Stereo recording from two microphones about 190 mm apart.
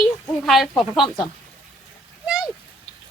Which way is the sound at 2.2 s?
5° right (ahead or behind).